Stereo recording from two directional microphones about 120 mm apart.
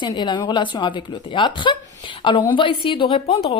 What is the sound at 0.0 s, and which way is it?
A woman's voice, 40° left (ahead or behind).